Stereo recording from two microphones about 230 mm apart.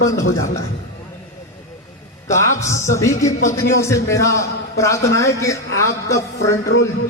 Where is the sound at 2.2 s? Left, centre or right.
Centre.